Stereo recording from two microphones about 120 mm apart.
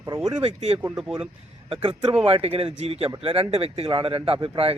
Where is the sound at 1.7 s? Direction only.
45° right (ahead or behind).